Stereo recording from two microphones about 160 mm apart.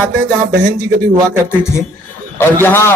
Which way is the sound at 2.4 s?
15° left (ahead or behind).